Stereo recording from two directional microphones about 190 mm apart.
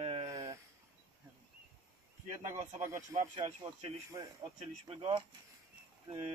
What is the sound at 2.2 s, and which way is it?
Speech, 40° right (ahead or behind).